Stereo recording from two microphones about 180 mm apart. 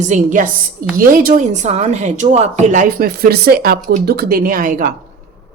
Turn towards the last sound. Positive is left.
turn(degrees=-50)  # may be behind; listen again after turning